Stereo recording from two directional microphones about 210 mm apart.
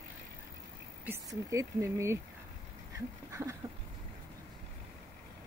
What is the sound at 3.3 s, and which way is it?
Speech, 15° right (ahead or behind).